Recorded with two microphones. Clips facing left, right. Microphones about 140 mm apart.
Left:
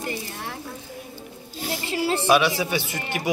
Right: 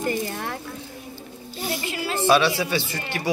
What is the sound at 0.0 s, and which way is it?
Speech, 50° right (ahead or behind).